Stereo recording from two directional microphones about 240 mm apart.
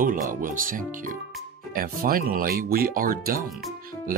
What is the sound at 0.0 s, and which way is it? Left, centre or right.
Speech, right.